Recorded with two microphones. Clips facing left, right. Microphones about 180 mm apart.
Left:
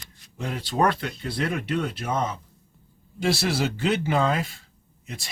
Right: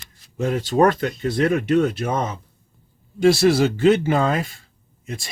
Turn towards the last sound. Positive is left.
turn(degrees=-50)  # may be behind; listen again after turning